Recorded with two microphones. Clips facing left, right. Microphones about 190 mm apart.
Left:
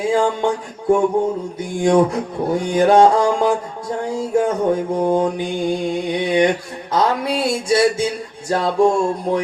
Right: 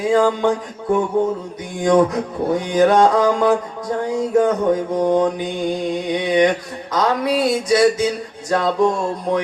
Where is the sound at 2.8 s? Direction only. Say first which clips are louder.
Left 1 dB; 30° left (ahead or behind).